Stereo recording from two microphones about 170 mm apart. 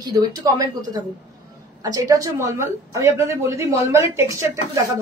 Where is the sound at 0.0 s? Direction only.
25° right (ahead or behind).